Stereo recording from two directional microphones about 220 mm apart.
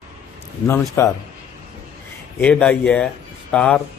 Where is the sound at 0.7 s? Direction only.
10° left (ahead or behind).